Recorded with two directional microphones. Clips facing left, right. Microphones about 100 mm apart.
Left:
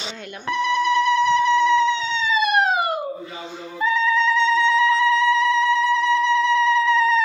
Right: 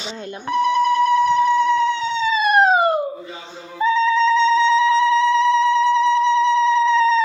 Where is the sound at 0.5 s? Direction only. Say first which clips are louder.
Right 3 dB; 40° right (ahead or behind).